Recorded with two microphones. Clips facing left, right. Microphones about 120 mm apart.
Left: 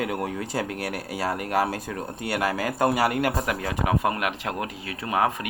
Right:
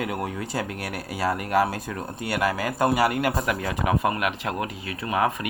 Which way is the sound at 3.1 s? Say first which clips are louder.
Even; 35° left (ahead or behind).